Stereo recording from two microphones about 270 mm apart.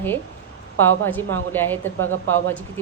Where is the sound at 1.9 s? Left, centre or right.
Right.